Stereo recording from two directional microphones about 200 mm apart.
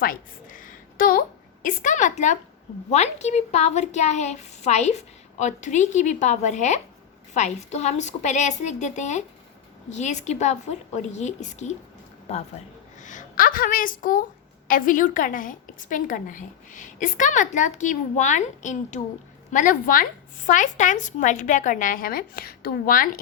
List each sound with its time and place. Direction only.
0.0 s a sound: 45° left (ahead or behind)
1.6 s a woman's voice: 40° left (ahead or behind)
13.0 s a woman's voice: 40° left (ahead or behind)